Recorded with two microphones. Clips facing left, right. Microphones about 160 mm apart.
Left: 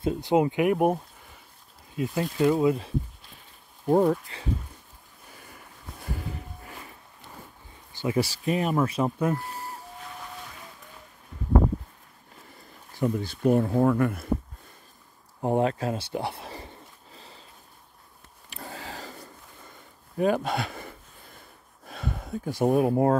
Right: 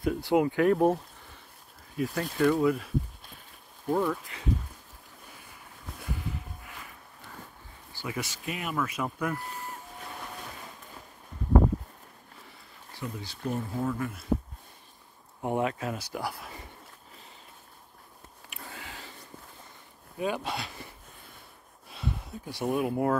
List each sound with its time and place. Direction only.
0.0 s speech: 20° left (ahead or behind)
2.0 s speech: 20° left (ahead or behind)
3.9 s speech: 45° left (ahead or behind)
7.9 s speech: 25° left (ahead or behind)
13.0 s speech: 50° left (ahead or behind)
15.4 s speech: 35° left (ahead or behind)
18.5 s a sound: 35° left (ahead or behind)
20.2 s speech: 50° left (ahead or behind)
21.8 s speech: 50° left (ahead or behind); by 23.1 s 35° left (ahead or behind)